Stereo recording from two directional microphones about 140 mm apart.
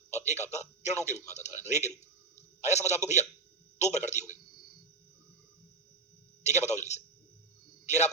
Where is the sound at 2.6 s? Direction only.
55° left (ahead or behind).